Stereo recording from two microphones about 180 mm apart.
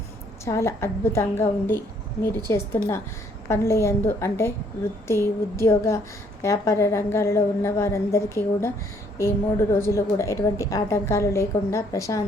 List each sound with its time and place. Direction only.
0.4 s a woman's voice: 15° left (ahead or behind)